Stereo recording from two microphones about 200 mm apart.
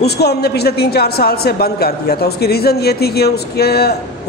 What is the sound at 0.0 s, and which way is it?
A man's voice, 55° left (ahead or behind).